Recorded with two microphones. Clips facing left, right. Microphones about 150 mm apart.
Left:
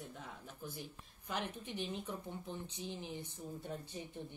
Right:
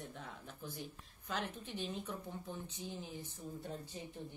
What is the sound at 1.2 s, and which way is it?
A woman's voice, 15° left (ahead or behind).